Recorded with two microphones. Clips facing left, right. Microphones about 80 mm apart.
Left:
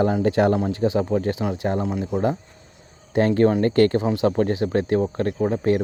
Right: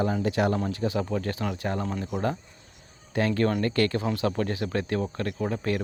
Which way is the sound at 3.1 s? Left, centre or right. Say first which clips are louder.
Left 7 dB; left.